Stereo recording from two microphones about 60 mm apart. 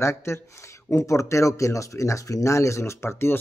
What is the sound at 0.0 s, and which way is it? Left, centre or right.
Speech, left.